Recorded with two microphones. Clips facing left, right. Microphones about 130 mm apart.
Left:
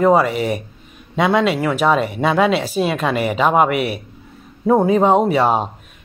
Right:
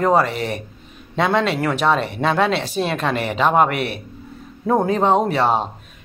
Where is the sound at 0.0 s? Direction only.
10° left (ahead or behind).